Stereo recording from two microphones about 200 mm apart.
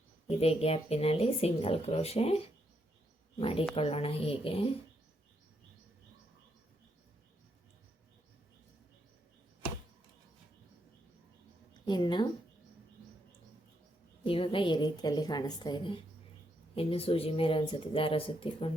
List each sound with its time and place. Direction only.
0.3 s speech: 30° left (ahead or behind)
11.7 s a woman's voice: 20° left (ahead or behind)
14.3 s speech: 25° left (ahead or behind)